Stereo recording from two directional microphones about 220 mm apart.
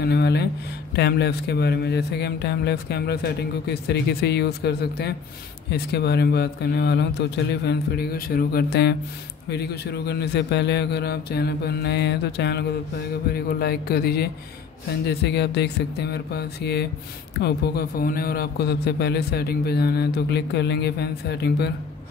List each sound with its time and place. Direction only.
0.0 s a man's voice: 50° left (ahead or behind)